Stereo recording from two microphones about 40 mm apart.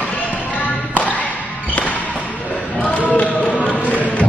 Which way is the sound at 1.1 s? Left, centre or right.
Left.